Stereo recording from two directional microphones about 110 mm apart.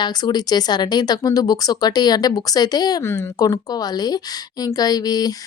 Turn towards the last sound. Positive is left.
turn(degrees=35)  # may be behind; listen again after turning